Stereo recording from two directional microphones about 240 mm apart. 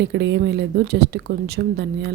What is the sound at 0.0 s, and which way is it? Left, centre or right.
A woman's voice, right.